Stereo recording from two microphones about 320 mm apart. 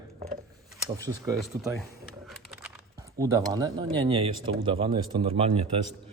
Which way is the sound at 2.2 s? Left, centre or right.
Centre.